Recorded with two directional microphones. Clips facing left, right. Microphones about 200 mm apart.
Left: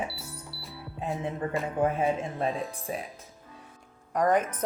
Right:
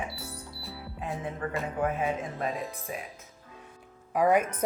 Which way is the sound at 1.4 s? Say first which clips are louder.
Left 3 dB; 25° left (ahead or behind).